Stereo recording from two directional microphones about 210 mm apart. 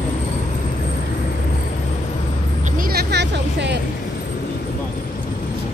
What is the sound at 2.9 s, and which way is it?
Vehicle, 55° right (ahead or behind).